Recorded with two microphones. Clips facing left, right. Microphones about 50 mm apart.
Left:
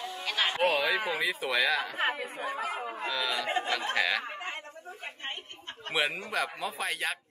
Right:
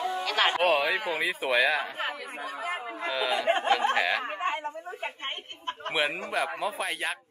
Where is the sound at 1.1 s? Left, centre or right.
Right.